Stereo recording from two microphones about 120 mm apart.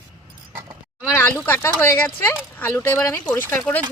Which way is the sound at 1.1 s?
10° left (ahead or behind).